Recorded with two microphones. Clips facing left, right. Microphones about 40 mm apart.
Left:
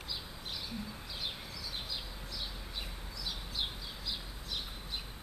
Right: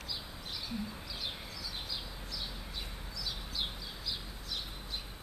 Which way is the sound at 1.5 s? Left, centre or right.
Centre.